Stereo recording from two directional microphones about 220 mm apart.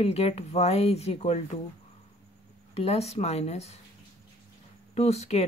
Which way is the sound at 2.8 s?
30° left (ahead or behind).